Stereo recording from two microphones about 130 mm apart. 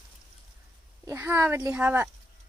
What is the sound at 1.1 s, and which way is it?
Speech, 20° right (ahead or behind).